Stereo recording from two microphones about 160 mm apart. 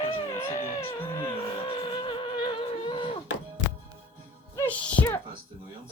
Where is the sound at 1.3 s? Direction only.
30° left (ahead or behind).